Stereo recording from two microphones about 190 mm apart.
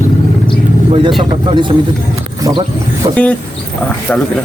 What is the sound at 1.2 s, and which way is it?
Speech, 25° right (ahead or behind).